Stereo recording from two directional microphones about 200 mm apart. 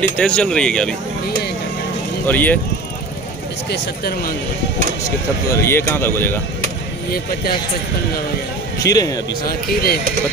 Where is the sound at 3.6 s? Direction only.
50° left (ahead or behind).